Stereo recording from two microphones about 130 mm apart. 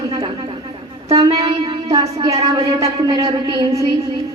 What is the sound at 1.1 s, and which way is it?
Speech, 30° right (ahead or behind).